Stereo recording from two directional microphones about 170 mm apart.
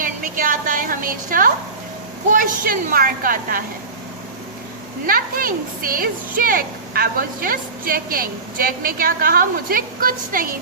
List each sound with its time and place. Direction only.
0.0 s a sound: 55° right (ahead or behind)
2.3 s speech: 50° right (ahead or behind)
5.0 s speech: 55° right (ahead or behind)